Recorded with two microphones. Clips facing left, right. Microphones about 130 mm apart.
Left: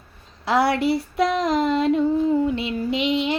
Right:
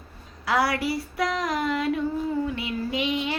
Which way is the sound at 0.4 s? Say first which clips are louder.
Left 5 dB; 25° left (ahead or behind).